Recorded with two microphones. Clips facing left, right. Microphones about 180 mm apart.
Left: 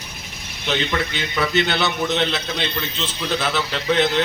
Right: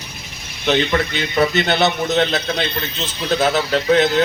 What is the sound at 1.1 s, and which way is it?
A man's voice, 45° right (ahead or behind).